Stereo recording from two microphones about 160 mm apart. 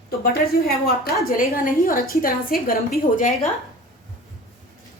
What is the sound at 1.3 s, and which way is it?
A woman's voice, 60° left (ahead or behind).